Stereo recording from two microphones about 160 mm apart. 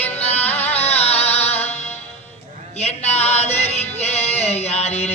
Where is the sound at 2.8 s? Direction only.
40° left (ahead or behind).